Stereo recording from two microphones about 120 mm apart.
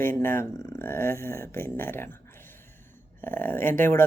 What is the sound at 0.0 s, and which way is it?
Speech, 20° left (ahead or behind).